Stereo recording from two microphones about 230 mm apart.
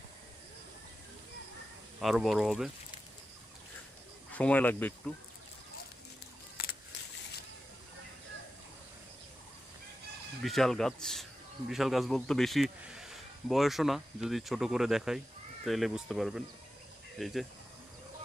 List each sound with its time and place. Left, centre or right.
2.0 s speech: centre
4.3 s speech: centre
6.6 s a sound: left
10.4 s speech: centre